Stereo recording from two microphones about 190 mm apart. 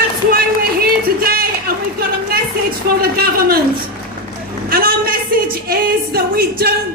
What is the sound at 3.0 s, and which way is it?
Speech, 50° right (ahead or behind).